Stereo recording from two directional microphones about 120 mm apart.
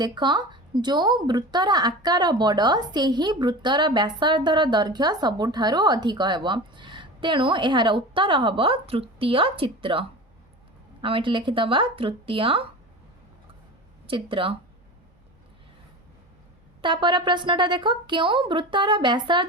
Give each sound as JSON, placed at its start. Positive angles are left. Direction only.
{"t": 0.0, "sound": "speech", "side_deg": -40}
{"t": 14.1, "sound": "speech", "side_deg": -45}
{"t": 16.8, "sound": "speech", "side_deg": -40}